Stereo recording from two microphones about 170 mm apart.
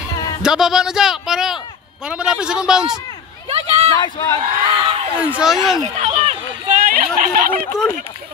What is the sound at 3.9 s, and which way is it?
Speech, 25° left (ahead or behind).